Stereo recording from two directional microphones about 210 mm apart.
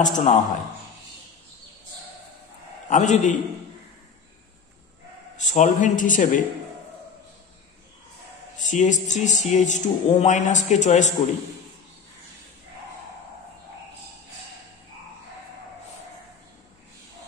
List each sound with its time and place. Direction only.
0.0 s speech: 35° left (ahead or behind)
2.9 s speech: 35° left (ahead or behind)
5.4 s speech: 35° left (ahead or behind)
8.5 s speech: 35° left (ahead or behind)